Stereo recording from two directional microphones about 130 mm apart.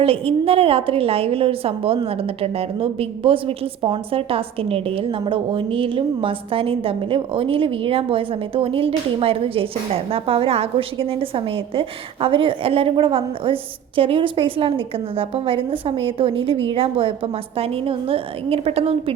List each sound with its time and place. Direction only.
0.0 s a woman's voice: 45° right (ahead or behind)